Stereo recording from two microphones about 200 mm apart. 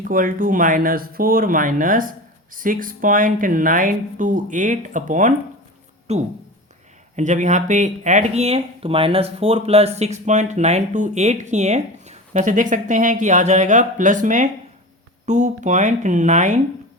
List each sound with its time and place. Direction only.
0.1 s speech: 40° right (ahead or behind)